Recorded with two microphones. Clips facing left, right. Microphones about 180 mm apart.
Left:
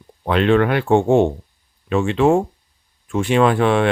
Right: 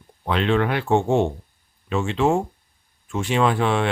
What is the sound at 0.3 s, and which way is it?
Speech, 55° left (ahead or behind).